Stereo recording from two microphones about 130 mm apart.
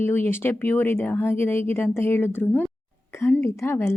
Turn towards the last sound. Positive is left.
turn(degrees=20)  # may be behind; listen again after turning